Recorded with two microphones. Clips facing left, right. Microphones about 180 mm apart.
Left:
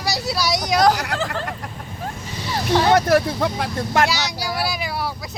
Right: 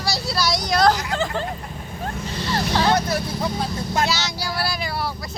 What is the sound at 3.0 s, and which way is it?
Speech, 90° left.